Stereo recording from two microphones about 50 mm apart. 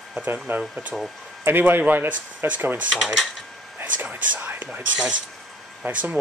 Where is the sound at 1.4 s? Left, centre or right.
Right.